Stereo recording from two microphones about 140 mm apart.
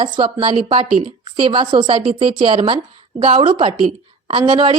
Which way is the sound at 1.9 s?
40° right (ahead or behind).